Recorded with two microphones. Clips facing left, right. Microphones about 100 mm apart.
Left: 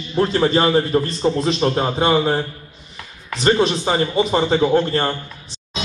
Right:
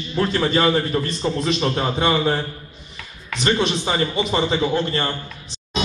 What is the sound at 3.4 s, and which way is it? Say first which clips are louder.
A man's voice: left 4 dB; 35° left (ahead or behind).